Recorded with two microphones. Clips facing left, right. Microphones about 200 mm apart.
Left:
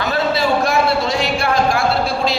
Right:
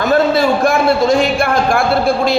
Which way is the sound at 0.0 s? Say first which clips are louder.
Right 6 dB; 50° right (ahead or behind).